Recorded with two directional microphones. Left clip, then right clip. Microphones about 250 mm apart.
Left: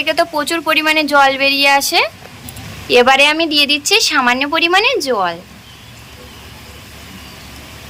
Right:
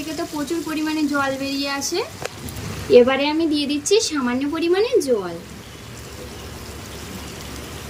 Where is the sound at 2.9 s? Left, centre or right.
Centre.